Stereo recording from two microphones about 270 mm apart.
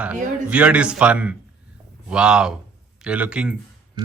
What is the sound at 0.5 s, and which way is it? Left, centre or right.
Speech, centre.